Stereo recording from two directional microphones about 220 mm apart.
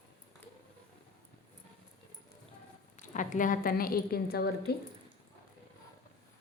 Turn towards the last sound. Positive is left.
turn(degrees=45)  # may be behind; listen again after turning